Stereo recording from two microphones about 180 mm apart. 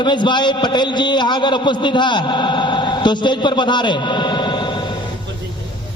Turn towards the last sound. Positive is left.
turn(degrees=25)  # may be behind; listen again after turning